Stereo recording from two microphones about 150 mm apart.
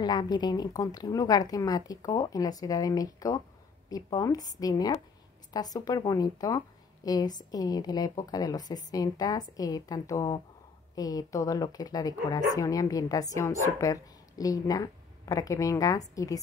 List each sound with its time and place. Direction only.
0.0 s a woman's voice: 25° left (ahead or behind)